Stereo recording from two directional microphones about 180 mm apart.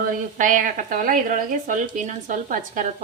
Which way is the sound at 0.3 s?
45° right (ahead or behind).